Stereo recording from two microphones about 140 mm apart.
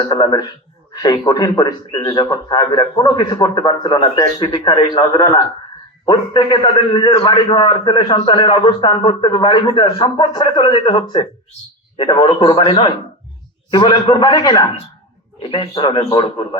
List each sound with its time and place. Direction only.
0.0 s a man's voice: 30° left (ahead or behind)